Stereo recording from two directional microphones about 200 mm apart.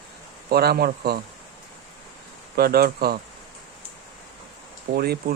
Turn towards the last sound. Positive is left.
turn(degrees=-50)  # may be behind; listen again after turning